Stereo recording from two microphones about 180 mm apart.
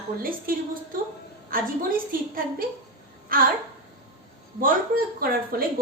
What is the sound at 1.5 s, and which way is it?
Speech, 50° right (ahead or behind).